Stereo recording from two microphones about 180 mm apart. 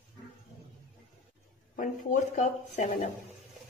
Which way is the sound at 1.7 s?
45° left (ahead or behind).